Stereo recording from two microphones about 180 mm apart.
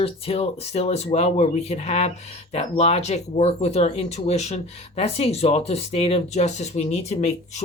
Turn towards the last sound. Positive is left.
turn(degrees=40)  # may be behind; listen again after turning